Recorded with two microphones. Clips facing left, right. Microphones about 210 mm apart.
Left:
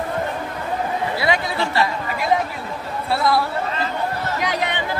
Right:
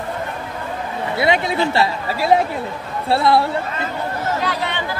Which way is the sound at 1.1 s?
25° right (ahead or behind).